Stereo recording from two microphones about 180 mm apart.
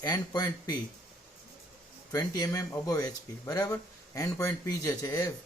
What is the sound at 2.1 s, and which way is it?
Speech, 20° left (ahead or behind).